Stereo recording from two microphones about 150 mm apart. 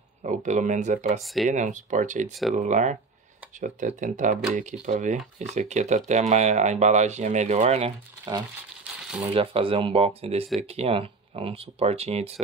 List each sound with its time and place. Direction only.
0.2 s speech: 55° right (ahead or behind)
1.2 s speech: centre (ahead or behind)
1.5 s speech: 55° right (ahead or behind)
9.0 s crumpling: 5° right (ahead or behind)
9.3 s speech: 40° right (ahead or behind)